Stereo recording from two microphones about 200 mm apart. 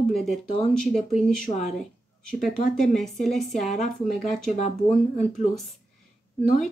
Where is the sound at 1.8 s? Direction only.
5° left (ahead or behind).